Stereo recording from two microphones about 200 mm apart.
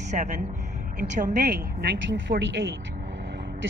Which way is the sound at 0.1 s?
40° right (ahead or behind).